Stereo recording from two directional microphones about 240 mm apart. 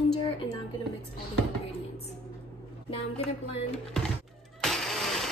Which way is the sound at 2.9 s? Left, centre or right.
Left.